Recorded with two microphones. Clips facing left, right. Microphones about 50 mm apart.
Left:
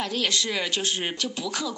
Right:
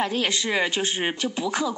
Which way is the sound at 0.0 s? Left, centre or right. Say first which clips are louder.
Right 2 dB; right.